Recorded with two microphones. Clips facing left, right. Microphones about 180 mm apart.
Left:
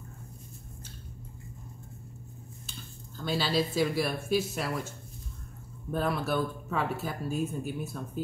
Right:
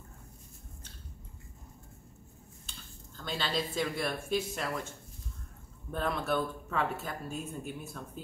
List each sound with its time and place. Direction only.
3.2 s speech: 5° left (ahead or behind)